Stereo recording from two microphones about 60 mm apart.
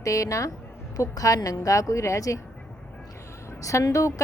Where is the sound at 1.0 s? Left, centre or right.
Left.